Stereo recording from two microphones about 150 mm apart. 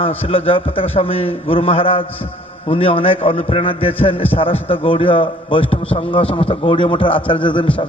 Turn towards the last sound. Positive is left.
turn(degrees=35)  # may be behind; listen again after turning